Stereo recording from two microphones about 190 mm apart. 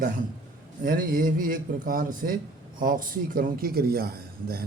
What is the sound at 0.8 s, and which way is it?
A man's voice, 45° right (ahead or behind).